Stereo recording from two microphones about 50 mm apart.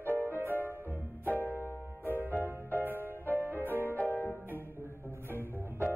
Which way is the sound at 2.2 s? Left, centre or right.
Right.